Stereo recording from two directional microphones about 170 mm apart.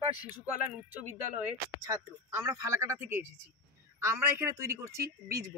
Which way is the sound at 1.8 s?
20° right (ahead or behind).